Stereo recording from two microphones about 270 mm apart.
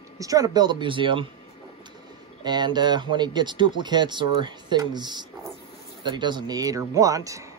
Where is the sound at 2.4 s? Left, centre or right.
Centre.